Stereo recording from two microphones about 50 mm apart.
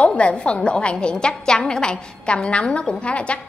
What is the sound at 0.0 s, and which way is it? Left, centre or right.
A woman's voice, left.